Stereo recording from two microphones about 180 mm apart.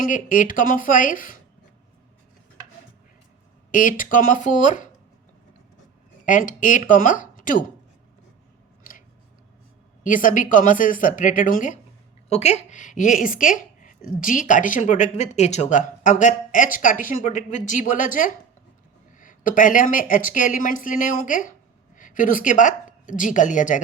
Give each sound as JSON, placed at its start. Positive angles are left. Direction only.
{"t": 0.0, "sound": "a woman's voice", "side_deg": 45}
{"t": 3.7, "sound": "a woman's voice", "side_deg": 50}
{"t": 6.2, "sound": "speech", "side_deg": 45}
{"t": 8.8, "sound": "a sound", "side_deg": 50}
{"t": 10.0, "sound": "a woman's voice", "side_deg": 50}